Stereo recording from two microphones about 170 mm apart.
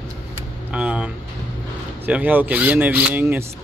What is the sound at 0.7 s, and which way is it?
Speech, 5° right (ahead or behind).